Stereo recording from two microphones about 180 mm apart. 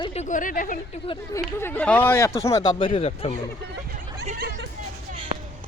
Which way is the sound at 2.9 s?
35° left (ahead or behind).